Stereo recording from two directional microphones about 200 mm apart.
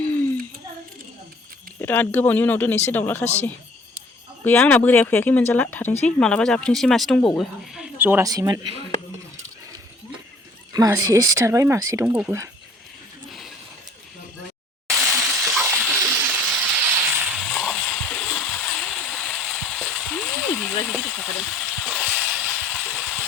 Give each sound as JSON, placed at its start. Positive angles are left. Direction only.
{"t": 1.8, "sound": "speech", "side_deg": 10}
{"t": 4.4, "sound": "speech", "side_deg": 5}
{"t": 10.7, "sound": "speech", "side_deg": -15}
{"t": 14.9, "sound": "a sound", "side_deg": 0}
{"t": 22.4, "sound": "vehicle", "side_deg": 10}